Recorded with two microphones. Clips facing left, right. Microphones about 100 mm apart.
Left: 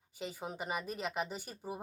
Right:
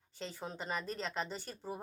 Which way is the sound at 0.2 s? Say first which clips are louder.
Left 2 dB; 10° left (ahead or behind).